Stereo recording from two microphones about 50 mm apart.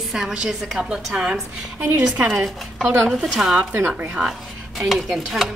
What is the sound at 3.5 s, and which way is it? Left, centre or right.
Speech, right.